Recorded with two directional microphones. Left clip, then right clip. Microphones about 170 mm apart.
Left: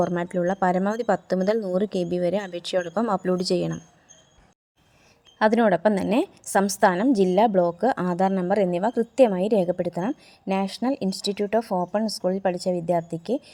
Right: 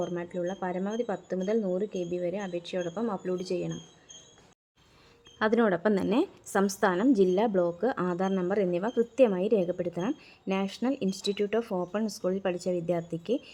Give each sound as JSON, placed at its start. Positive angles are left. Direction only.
{"t": 0.0, "sound": "speech", "side_deg": 35}
{"t": 5.4, "sound": "a woman's voice", "side_deg": 20}